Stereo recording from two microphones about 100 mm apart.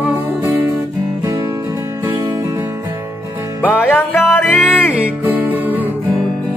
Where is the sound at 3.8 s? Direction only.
20° left (ahead or behind).